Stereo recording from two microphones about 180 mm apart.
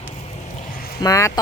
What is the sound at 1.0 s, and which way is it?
Speech, 20° left (ahead or behind).